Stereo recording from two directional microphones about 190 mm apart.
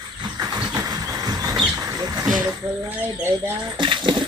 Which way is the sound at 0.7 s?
20° right (ahead or behind).